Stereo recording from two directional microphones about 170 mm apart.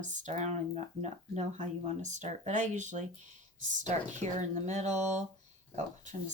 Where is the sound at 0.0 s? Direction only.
45° right (ahead or behind).